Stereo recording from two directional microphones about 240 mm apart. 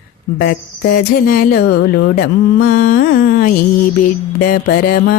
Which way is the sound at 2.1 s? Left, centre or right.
Left.